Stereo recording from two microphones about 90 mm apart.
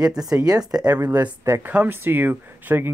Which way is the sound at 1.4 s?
30° right (ahead or behind).